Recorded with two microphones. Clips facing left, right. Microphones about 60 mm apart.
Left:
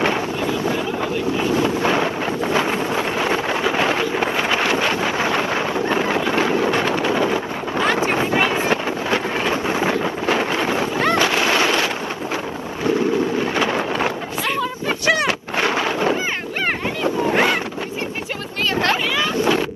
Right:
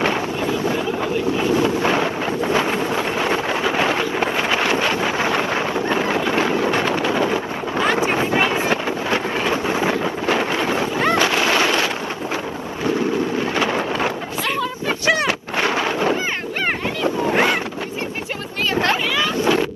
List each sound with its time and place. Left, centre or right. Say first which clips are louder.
0.4 s boat: even; right
1.4 s vehicle: even; right
3.6 s wind noise: even; right
5.4 s wind noise: even; right
6.8 s wind noise: even; left
7.3 s wind noise: even; right
8.5 s wind noise: even; left
9.7 s wind noise: even; right
10.0 s wind noise: even; left
11.2 s a sound: even; right
17.3 s wind noise: even; right
19.3 s boat: even; right